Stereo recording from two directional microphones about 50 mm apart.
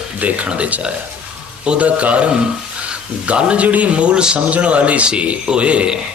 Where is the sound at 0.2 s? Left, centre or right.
Right.